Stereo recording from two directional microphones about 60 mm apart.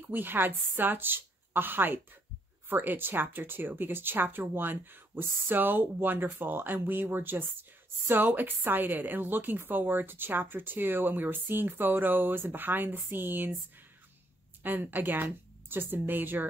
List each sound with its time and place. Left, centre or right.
0.1 s a woman's voice: right
14.6 s speech: right